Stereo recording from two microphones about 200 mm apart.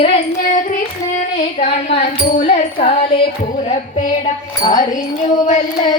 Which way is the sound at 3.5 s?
35° left (ahead or behind).